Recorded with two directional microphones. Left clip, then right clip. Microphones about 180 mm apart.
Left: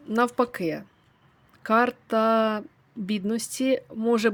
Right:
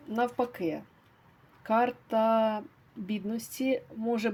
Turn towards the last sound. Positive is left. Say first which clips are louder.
# left 7 dB
turn(degrees=45)  # may be behind; listen again after turning